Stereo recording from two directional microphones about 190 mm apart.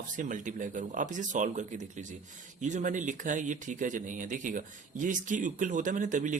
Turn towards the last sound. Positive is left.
turn(degrees=-40)  # may be behind; listen again after turning